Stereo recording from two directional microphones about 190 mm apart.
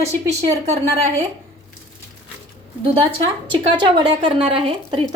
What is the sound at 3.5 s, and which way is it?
A woman's voice, 25° right (ahead or behind).